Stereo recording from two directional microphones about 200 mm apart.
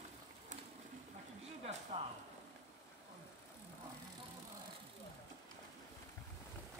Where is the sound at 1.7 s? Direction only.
35° right (ahead or behind).